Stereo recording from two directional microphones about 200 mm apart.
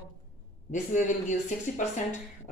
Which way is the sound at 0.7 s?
40° left (ahead or behind).